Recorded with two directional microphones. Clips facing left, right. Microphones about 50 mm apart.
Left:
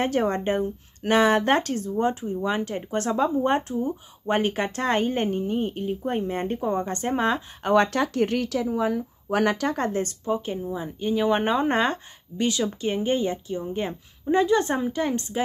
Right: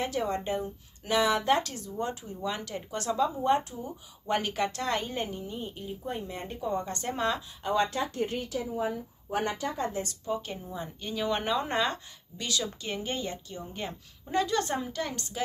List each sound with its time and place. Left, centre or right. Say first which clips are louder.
0.0 s speech: left 7 dB; left
7.6 s speech: left 7 dB; left
10.2 s speech: left 7 dB; left